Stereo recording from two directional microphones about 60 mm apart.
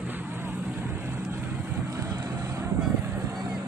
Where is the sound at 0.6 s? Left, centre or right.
Right.